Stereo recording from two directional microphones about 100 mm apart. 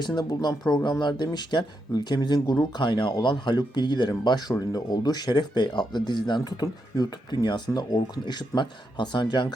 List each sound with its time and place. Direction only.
0.0 s speech: 45° left (ahead or behind)